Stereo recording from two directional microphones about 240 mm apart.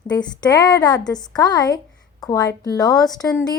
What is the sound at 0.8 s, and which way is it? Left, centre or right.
Speech, centre.